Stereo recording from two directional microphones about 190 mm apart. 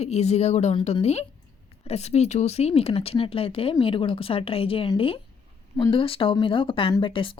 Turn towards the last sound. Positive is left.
turn(degrees=25)  # may be behind; listen again after turning